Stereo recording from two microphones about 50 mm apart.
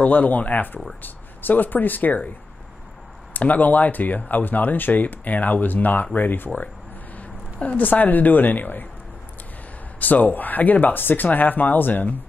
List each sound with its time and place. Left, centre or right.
0.0 s speech: left
3.3 s speech: left
7.6 s speech: left
9.9 s speech: left